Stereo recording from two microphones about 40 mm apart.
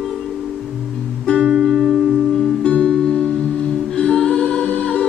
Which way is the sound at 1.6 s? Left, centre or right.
Centre.